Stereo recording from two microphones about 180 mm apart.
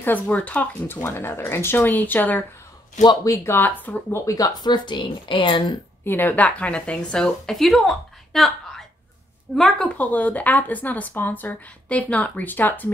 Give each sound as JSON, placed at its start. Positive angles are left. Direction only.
{"t": 0.0, "sound": "a woman's voice", "side_deg": 10}
{"t": 6.0, "sound": "a woman's voice", "side_deg": 10}